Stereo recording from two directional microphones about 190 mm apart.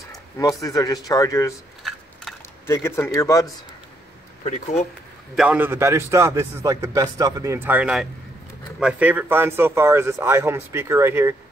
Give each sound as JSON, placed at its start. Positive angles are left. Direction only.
{"t": 0.4, "sound": "speech", "side_deg": 20}
{"t": 1.8, "sound": "a sound", "side_deg": 0}
{"t": 2.6, "sound": "speech", "side_deg": 15}
{"t": 4.5, "sound": "speech", "side_deg": 35}
{"t": 5.3, "sound": "a man's voice", "side_deg": -5}